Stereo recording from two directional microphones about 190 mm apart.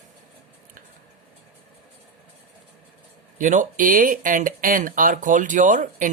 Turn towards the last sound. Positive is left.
turn(degrees=-45)  # may be behind; listen again after turning